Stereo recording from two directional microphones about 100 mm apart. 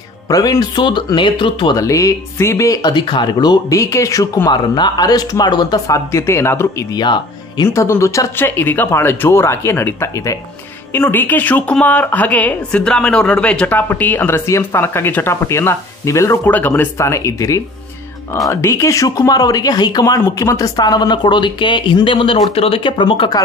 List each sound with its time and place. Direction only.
0.3 s speech: 40° left (ahead or behind); by 1.8 s 55° left (ahead or behind)
1.8 s speech: 35° left (ahead or behind)
3.7 s speech: 30° left (ahead or behind)
6.1 s speech: 30° left (ahead or behind)
6.9 s speech: 45° left (ahead or behind)
7.6 s speech: 30° left (ahead or behind)
16.4 s speech: 20° left (ahead or behind); by 22.8 s 75° left (ahead or behind)
22.8 s speech: 55° left (ahead or behind)